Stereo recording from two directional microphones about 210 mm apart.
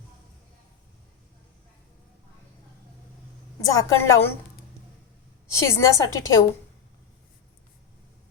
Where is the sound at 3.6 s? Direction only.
15° left (ahead or behind).